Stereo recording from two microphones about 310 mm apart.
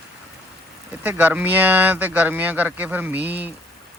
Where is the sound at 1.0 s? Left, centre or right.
Centre.